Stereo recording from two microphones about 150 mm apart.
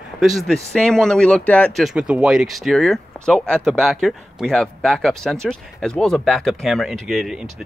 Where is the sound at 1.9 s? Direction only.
5° right (ahead or behind).